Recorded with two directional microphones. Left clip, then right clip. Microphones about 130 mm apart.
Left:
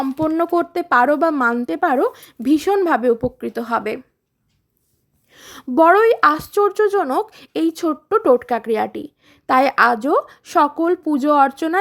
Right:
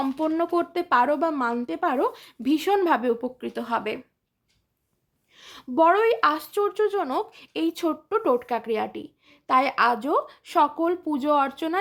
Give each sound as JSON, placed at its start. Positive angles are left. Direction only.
{"t": 0.2, "sound": "speech", "side_deg": 35}
{"t": 5.3, "sound": "speech", "side_deg": 45}